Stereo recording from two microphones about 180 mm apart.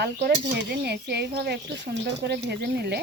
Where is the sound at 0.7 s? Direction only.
65° right (ahead or behind).